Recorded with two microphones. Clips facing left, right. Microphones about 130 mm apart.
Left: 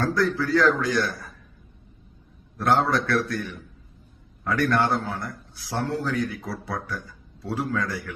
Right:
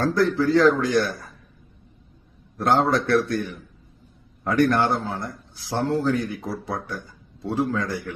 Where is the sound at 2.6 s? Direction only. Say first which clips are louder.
Right 2 dB; 25° right (ahead or behind).